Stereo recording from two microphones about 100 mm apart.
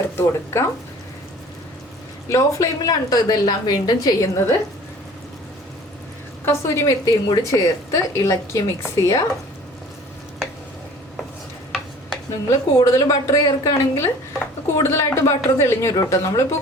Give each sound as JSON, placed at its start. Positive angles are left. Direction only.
{"t": 0.2, "sound": "speech", "side_deg": 30}
{"t": 2.3, "sound": "a woman's voice", "side_deg": 35}
{"t": 6.4, "sound": "a woman's voice", "side_deg": 25}
{"t": 12.5, "sound": "a woman's voice", "side_deg": 30}